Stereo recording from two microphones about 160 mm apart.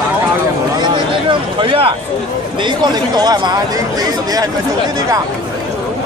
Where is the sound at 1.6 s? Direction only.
35° right (ahead or behind).